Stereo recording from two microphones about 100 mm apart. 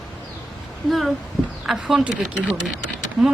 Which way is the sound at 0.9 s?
Centre (ahead or behind).